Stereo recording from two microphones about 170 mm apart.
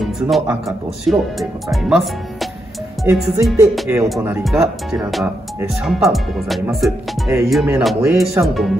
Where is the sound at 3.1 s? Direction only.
15° right (ahead or behind).